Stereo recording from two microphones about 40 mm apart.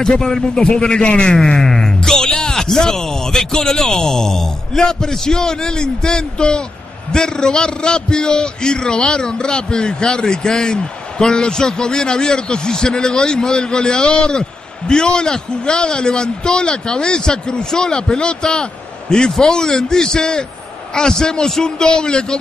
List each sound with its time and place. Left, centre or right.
0.0 s a man's voice: centre
1.4 s a man's voice: centre